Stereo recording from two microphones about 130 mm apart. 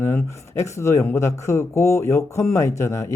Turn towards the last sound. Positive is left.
turn(degrees=20)  # may be behind; listen again after turning